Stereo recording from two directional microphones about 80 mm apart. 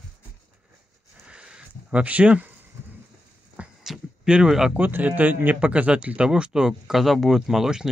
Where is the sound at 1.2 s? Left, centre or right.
Centre.